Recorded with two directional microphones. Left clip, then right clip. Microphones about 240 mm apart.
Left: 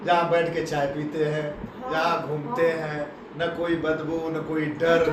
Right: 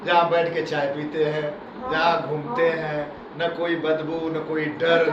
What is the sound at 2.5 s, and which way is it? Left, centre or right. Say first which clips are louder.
A man's voice: right 2 dB; left.